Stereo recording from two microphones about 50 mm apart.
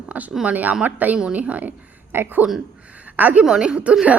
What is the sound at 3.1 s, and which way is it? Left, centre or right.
Speech, right.